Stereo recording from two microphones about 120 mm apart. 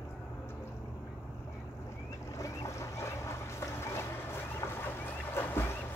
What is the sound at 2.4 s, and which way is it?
Boat, 25° left (ahead or behind).